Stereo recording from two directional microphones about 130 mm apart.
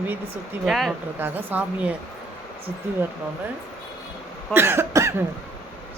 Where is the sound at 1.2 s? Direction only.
15° right (ahead or behind).